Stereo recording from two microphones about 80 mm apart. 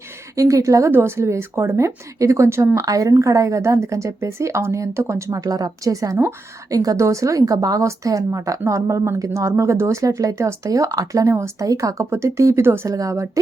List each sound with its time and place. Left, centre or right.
0.3 s a woman's voice: right
0.9 s a woman's voice: right
12.9 s a woman's voice: right